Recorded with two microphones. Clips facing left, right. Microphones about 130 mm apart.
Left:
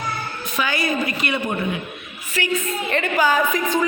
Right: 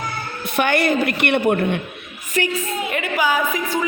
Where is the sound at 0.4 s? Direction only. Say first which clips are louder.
Right 6 dB; 60° right (ahead or behind).